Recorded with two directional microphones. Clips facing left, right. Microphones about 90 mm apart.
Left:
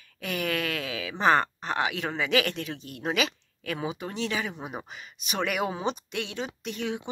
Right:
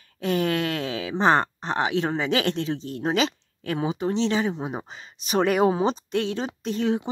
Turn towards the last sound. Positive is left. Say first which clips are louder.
# right 8 dB
turn(degrees=-35)  # may be behind; listen again after turning